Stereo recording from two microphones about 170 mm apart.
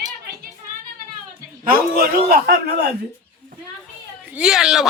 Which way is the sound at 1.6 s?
60° right (ahead or behind).